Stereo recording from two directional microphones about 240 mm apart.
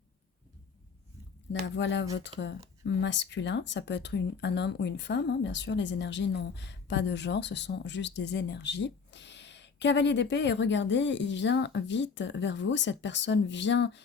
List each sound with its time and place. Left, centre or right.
1.6 s speech: left